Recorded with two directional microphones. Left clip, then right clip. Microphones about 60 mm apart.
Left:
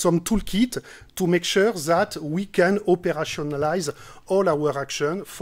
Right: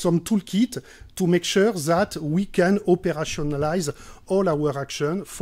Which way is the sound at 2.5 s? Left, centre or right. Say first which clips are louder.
Left 1 dB; left.